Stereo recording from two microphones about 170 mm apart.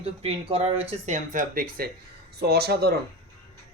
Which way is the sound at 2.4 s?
70° right (ahead or behind).